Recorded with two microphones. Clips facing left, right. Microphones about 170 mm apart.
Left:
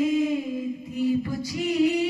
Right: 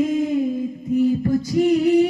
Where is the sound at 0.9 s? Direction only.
50° right (ahead or behind).